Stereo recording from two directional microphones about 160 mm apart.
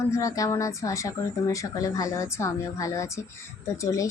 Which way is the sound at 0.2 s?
20° left (ahead or behind).